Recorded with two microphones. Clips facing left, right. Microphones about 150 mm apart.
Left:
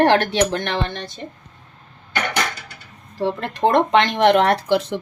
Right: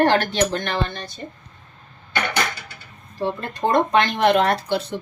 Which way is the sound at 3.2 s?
90° left.